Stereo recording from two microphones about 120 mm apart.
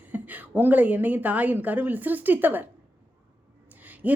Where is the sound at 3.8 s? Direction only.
15° right (ahead or behind).